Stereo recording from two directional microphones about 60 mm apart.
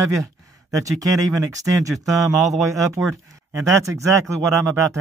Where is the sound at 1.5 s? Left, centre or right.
Right.